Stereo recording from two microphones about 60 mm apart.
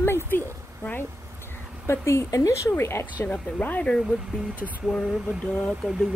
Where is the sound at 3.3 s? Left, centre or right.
Left.